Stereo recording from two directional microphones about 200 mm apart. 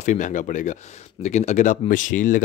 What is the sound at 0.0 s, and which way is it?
Speech, 35° left (ahead or behind).